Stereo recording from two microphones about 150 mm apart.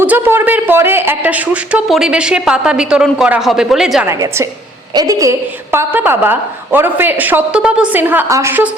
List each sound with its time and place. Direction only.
0.0 s speech: 15° right (ahead or behind)
4.0 s a woman's voice: 20° right (ahead or behind)